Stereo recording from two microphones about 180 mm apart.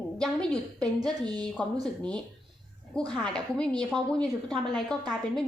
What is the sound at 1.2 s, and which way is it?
Speech, 20° right (ahead or behind).